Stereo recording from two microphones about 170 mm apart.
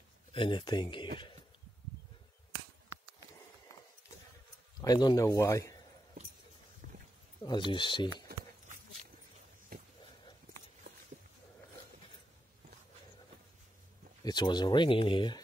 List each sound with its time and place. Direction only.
0.3 s speech: 30° left (ahead or behind)
4.8 s speech: 25° left (ahead or behind)
7.4 s speech: 25° left (ahead or behind)
9.7 s a sound: 65° right (ahead or behind)
14.2 s speech: 25° left (ahead or behind)